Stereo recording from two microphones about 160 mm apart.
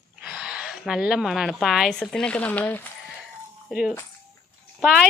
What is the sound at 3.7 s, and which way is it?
Speech, 5° right (ahead or behind).